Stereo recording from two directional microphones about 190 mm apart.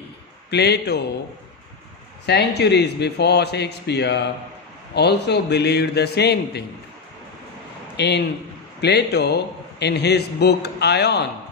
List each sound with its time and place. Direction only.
0.5 s a man's voice: 60° left (ahead or behind)
2.2 s a man's voice: 60° left (ahead or behind)
7.9 s a man's voice: 60° left (ahead or behind)